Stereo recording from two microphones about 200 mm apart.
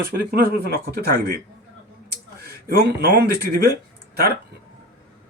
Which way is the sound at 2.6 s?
50° right (ahead or behind).